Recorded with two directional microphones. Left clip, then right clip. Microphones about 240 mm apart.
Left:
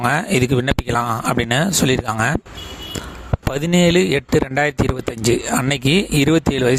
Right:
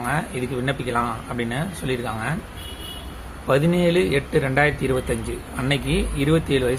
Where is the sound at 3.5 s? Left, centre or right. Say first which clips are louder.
Left 4 dB; left.